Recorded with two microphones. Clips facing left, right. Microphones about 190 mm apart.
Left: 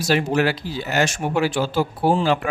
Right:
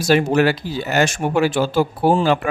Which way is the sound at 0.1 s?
50° right (ahead or behind).